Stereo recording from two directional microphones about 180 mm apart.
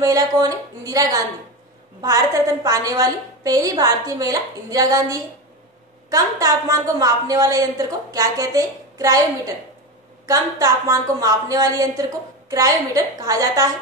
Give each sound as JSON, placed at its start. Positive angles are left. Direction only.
{"t": 0.0, "sound": "a woman's voice", "side_deg": -20}
{"t": 10.2, "sound": "a woman's voice", "side_deg": -20}